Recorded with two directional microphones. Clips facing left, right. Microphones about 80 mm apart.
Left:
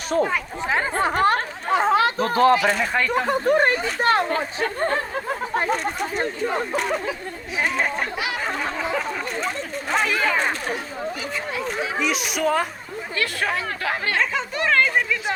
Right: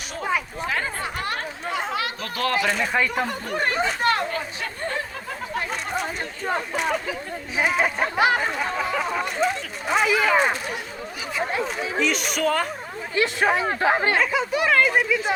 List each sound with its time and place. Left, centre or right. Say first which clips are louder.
0.1 s speech: left 12 dB; left
0.6 s speech: left 3 dB; left
1.0 s chatter: left 9 dB; left
2.6 s a man's voice: left 1 dB; centre
3.2 s speech: left 7 dB; left
5.5 s chatter: left 6 dB; left
6.7 s a man's voice: left 1 dB; centre
11.9 s a man's voice: right 3 dB; centre
13.1 s speech: right 4 dB; right
14.2 s speech: right 2 dB; centre